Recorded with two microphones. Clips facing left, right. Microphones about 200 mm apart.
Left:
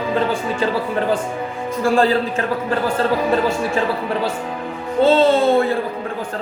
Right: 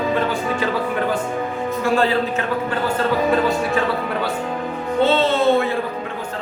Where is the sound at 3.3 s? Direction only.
30° left (ahead or behind).